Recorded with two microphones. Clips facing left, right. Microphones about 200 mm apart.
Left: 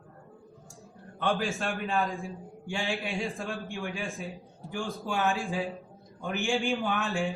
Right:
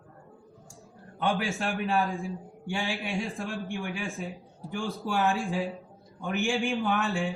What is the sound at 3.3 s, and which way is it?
A man's voice, centre (ahead or behind).